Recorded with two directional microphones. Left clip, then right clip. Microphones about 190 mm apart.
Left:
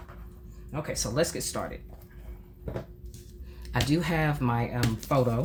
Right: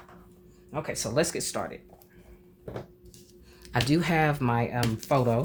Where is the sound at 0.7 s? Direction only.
35° right (ahead or behind).